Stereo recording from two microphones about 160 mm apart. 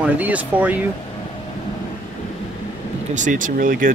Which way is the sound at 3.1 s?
50° right (ahead or behind).